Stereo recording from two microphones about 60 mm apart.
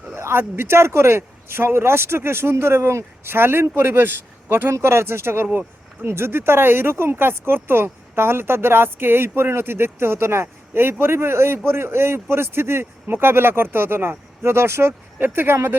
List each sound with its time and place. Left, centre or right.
0.1 s speech: right